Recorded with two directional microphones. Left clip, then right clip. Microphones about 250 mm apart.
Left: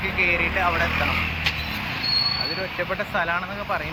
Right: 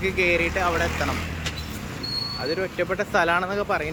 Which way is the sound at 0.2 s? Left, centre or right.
Centre.